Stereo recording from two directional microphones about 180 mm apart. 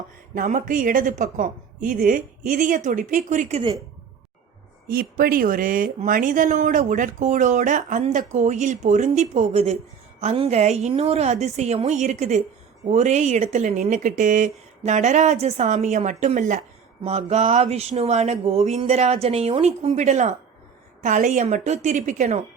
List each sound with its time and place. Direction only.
0.3 s speech: 45° right (ahead or behind)
4.9 s speech: 55° right (ahead or behind)